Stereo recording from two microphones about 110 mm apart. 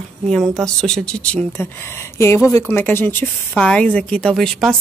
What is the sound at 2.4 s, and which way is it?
A woman's voice, 20° left (ahead or behind).